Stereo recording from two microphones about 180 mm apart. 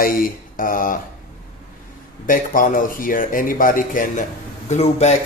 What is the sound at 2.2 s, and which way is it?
Speech, 50° left (ahead or behind).